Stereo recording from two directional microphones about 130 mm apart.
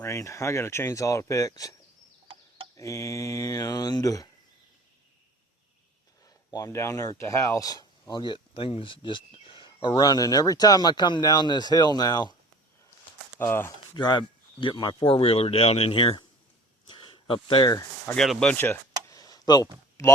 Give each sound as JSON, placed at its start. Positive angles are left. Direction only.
{"t": 0.0, "sound": "speech", "side_deg": 20}
{"t": 2.2, "sound": "fowl", "side_deg": -45}
{"t": 2.7, "sound": "speech", "side_deg": 25}
{"t": 6.2, "sound": "speech", "side_deg": 25}
{"t": 13.3, "sound": "speech", "side_deg": 20}
{"t": 13.9, "sound": "speech", "side_deg": 35}
{"t": 16.9, "sound": "a sound", "side_deg": 40}
{"t": 18.2, "sound": "speech", "side_deg": 5}
{"t": 19.0, "sound": "a sound", "side_deg": 30}